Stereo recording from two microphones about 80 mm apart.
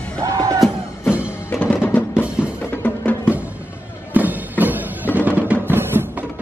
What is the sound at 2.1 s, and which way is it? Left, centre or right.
Music, centre.